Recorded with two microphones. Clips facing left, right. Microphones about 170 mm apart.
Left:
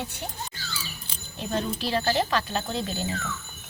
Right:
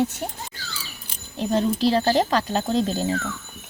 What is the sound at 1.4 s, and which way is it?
Speech, 35° right (ahead or behind).